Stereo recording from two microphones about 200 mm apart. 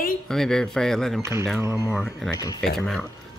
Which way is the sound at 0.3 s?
5° left (ahead or behind).